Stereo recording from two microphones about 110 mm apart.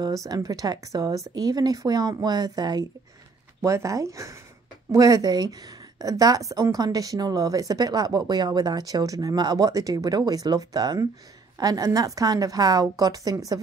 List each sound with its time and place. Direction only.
0.0 s a woman's voice: 30° right (ahead or behind)